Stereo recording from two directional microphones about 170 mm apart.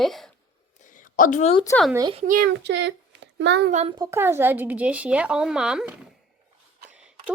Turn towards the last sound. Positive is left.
turn(degrees=-5)  # may be behind; listen again after turning